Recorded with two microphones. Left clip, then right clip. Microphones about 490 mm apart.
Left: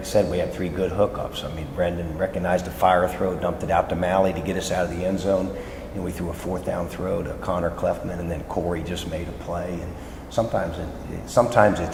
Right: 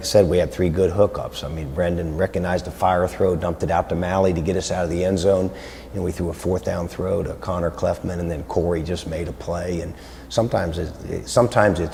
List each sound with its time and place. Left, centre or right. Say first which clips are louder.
0.0 s a man's voice: right 5 dB; right
11.3 s speech: even; right